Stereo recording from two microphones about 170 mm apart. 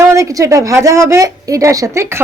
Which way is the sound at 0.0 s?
20° right (ahead or behind).